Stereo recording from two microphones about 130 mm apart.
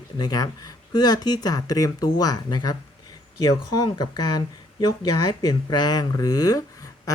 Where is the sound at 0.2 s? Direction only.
30° left (ahead or behind).